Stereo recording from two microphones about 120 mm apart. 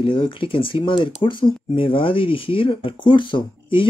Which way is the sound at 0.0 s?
45° left (ahead or behind).